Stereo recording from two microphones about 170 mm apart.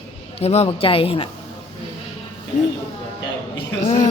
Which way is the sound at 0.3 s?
40° left (ahead or behind).